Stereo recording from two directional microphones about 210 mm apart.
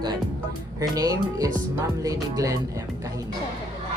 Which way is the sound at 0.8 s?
15° right (ahead or behind).